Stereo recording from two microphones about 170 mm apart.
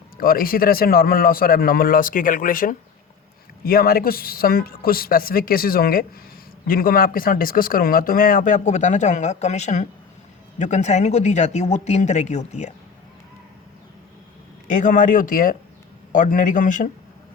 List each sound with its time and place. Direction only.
0.2 s speech: 60° left (ahead or behind); by 12.7 s 40° left (ahead or behind)
14.7 s speech: 50° left (ahead or behind)